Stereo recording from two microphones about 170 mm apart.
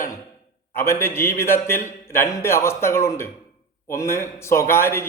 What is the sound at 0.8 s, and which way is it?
A man's voice, 15° left (ahead or behind).